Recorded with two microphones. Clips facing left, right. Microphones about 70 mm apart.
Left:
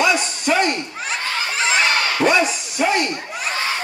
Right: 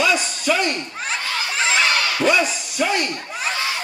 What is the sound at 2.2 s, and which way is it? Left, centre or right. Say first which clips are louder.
Speech: left 1 dB; left.